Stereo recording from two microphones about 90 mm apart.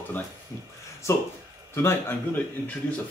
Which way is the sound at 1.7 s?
30° left (ahead or behind).